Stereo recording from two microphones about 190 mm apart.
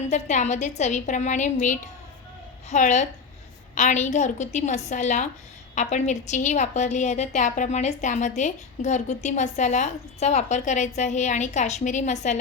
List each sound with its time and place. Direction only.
0.1 s a woman's voice: 35° left (ahead or behind)